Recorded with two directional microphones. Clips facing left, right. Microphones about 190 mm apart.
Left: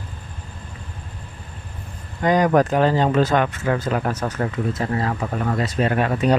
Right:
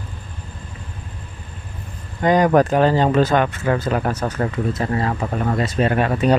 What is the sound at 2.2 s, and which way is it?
Speech, 30° right (ahead or behind).